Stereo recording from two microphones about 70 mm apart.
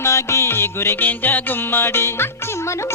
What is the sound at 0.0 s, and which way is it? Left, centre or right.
Music, left.